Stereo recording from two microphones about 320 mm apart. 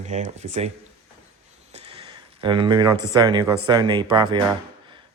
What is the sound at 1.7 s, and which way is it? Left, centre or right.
A man's voice, centre.